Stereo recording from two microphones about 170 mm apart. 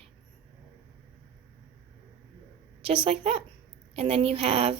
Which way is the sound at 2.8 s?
35° right (ahead or behind).